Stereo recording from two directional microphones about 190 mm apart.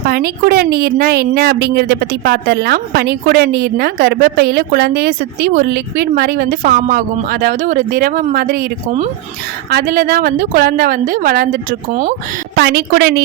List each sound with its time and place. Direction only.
0.0 s speech: 55° right (ahead or behind)
9.6 s a woman's voice: 55° right (ahead or behind)
12.5 s speech: 60° right (ahead or behind)